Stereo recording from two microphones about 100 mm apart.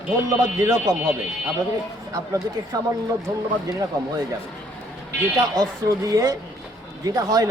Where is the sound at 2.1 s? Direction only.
35° right (ahead or behind).